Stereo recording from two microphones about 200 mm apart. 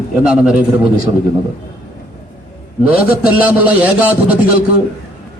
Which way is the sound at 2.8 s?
5° right (ahead or behind).